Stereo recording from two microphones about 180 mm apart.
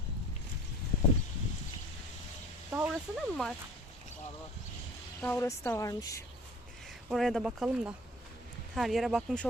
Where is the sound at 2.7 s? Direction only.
10° right (ahead or behind).